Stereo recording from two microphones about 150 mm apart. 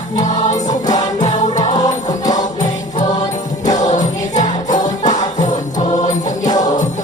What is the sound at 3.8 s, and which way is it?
Music, 55° left (ahead or behind).